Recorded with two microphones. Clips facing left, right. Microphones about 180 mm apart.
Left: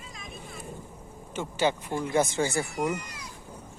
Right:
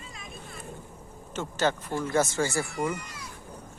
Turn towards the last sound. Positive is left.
turn(degrees=20)  # may be behind; listen again after turning